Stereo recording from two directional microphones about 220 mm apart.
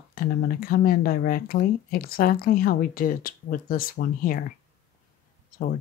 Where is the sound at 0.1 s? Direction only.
40° left (ahead or behind).